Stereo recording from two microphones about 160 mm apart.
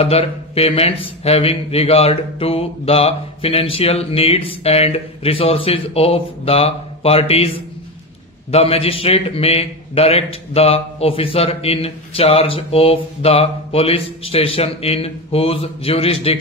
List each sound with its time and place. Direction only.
0.0 s a man's voice: 40° left (ahead or behind)